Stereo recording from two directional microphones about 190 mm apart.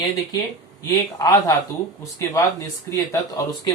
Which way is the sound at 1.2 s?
15° left (ahead or behind).